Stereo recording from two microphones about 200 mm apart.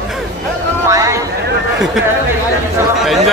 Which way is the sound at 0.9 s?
15° right (ahead or behind).